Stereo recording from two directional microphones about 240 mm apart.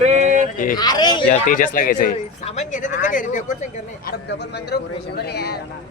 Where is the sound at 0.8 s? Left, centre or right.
Centre.